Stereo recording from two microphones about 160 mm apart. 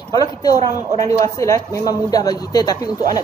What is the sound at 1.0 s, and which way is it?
A man's voice, 20° left (ahead or behind).